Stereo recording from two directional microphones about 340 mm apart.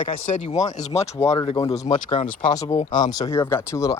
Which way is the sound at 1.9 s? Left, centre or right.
Left.